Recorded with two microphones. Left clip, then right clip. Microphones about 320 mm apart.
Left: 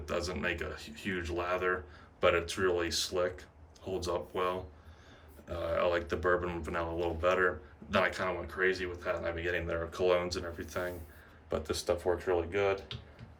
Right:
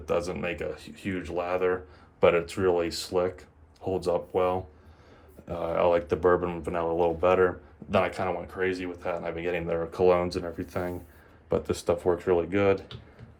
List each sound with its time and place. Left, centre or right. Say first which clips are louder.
0.0 s speech: right 6 dB; centre